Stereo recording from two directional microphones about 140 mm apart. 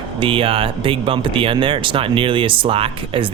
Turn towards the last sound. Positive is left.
turn(degrees=-40)  # may be behind; listen again after turning